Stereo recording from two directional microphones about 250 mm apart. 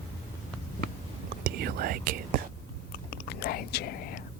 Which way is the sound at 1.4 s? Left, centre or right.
Right.